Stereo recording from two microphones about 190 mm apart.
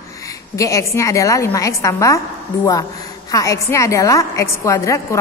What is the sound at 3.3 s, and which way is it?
A woman's voice, 15° left (ahead or behind).